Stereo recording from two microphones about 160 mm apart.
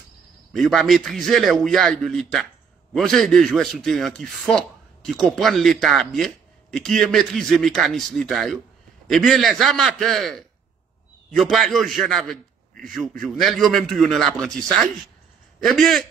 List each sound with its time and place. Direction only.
0.5 s a man's voice: centre (ahead or behind)